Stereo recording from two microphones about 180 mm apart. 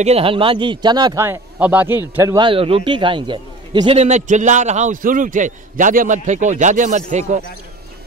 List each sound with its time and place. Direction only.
0.0 s speech: 35° right (ahead or behind); by 2.0 s 10° right (ahead or behind)
2.1 s a man's voice: 20° right (ahead or behind); by 7.4 s 40° right (ahead or behind)